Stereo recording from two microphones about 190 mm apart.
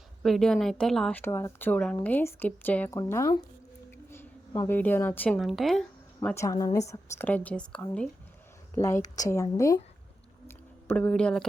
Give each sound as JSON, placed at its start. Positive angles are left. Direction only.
{"t": 0.2, "sound": "speech", "side_deg": 0}
{"t": 1.2, "sound": "speech", "side_deg": 15}
{"t": 3.9, "sound": "a sound", "side_deg": 10}
{"t": 5.4, "sound": "speech", "side_deg": 0}
{"t": 6.2, "sound": "speech", "side_deg": 15}
{"t": 10.5, "sound": "a sound", "side_deg": 10}